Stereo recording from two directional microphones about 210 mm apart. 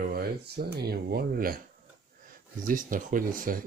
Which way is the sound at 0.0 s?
45° right (ahead or behind).